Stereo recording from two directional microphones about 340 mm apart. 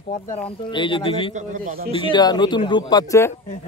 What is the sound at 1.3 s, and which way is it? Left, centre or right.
Speech, right.